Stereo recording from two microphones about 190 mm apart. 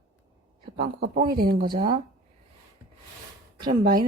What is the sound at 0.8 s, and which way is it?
Speech, 55° right (ahead or behind).